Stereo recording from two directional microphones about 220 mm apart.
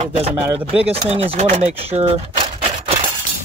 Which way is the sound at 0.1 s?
30° right (ahead or behind).